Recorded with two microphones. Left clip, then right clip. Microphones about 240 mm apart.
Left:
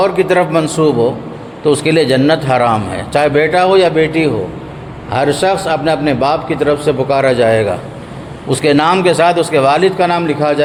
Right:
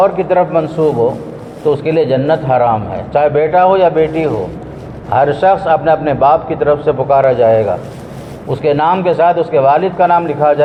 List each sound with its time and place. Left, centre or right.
0.0 s a man's voice: left